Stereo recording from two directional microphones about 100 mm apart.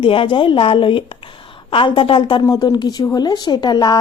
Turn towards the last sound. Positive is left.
turn(degrees=45)  # may be behind; listen again after turning